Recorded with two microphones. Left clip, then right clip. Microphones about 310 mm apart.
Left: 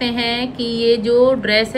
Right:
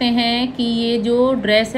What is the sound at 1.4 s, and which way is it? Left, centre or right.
Speech, centre.